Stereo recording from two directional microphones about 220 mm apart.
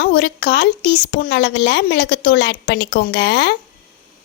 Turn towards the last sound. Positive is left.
turn(degrees=50)  # may be behind; listen again after turning